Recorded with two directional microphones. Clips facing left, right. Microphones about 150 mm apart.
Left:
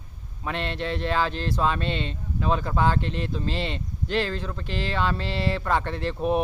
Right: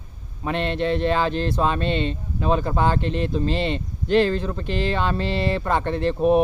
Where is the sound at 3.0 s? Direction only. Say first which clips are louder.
Right 6 dB; 55° right (ahead or behind).